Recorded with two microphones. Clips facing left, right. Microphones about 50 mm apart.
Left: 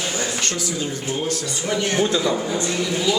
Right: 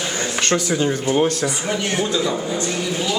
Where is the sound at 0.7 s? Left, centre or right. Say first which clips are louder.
Right 7 dB; right.